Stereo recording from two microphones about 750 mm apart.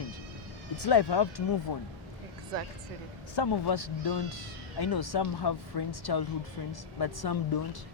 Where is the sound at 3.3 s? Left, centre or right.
Left.